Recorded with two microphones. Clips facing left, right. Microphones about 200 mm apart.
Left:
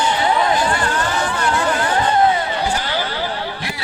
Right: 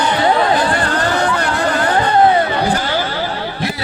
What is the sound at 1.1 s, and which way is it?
Chatter, 60° right (ahead or behind).